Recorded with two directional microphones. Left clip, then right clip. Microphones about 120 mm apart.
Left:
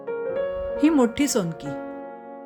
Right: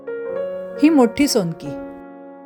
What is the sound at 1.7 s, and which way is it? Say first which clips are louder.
Music: right 1 dB; 5° left (ahead or behind).